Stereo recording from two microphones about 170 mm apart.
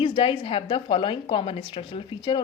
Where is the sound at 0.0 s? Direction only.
30° left (ahead or behind).